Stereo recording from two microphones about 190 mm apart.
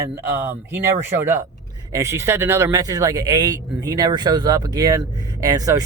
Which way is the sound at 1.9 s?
15° right (ahead or behind).